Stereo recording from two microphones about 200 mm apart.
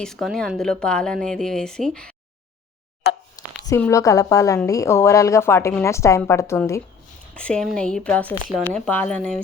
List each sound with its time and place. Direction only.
0.0 s speech: centre (ahead or behind)
3.3 s a woman's voice: 15° left (ahead or behind)